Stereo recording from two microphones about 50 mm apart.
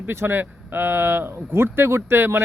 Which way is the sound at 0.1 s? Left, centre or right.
Right.